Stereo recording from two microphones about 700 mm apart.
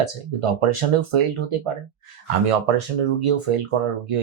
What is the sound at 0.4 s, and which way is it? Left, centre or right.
Speech, right.